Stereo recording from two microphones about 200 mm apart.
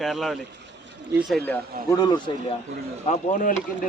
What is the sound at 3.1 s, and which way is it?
Speech, 35° left (ahead or behind).